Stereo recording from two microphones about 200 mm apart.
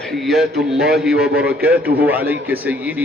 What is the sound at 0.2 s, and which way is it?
A man's voice, centre (ahead or behind).